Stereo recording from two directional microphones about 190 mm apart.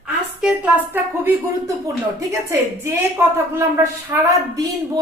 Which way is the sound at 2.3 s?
15° right (ahead or behind).